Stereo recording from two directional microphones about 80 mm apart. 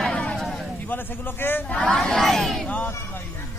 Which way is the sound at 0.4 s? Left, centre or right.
Centre.